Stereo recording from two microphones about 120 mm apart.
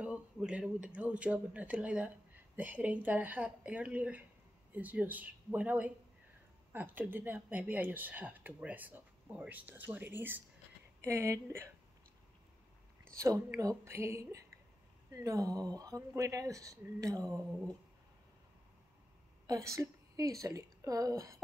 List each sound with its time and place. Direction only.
0.0 s speech: 10° right (ahead or behind)
13.1 s speech: 25° right (ahead or behind)
19.4 s a woman's voice: 25° right (ahead or behind)